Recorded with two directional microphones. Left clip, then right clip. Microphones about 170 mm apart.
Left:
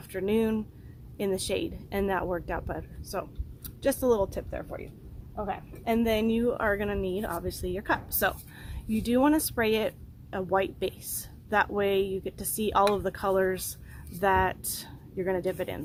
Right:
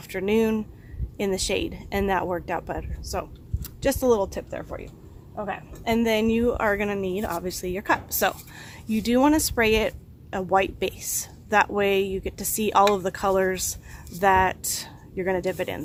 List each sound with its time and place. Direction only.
0.1 s a woman's voice: 30° right (ahead or behind)